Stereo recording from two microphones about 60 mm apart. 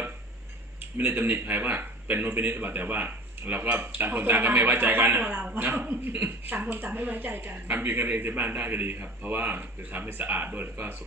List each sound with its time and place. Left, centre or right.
0.9 s a man's voice: right